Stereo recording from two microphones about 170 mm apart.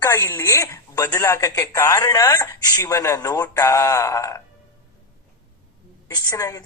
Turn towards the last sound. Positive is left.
turn(degrees=20)  # may be behind; listen again after turning